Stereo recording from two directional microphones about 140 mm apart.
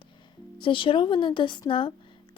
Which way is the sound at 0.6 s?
35° left (ahead or behind).